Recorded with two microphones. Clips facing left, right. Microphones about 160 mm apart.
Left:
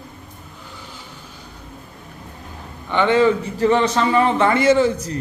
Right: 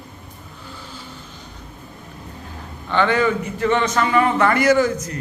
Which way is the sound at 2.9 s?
20° left (ahead or behind).